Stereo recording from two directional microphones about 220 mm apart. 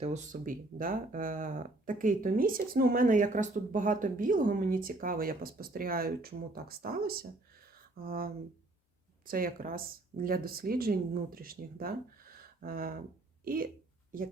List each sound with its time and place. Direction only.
0.0 s speech: 35° right (ahead or behind)